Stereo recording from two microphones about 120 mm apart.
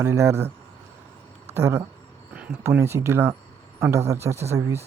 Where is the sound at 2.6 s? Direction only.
20° right (ahead or behind).